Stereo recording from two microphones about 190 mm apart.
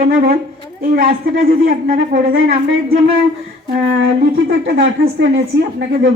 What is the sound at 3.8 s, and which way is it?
Speech, 75° right (ahead or behind).